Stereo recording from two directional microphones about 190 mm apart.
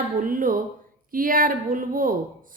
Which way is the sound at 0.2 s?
45° right (ahead or behind).